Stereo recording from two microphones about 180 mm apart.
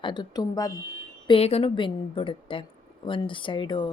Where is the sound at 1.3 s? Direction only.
35° left (ahead or behind).